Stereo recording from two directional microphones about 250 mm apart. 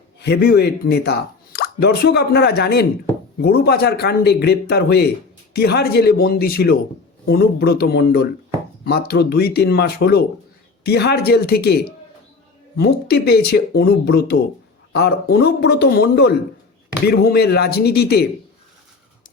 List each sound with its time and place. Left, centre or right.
0.2 s a man's voice: left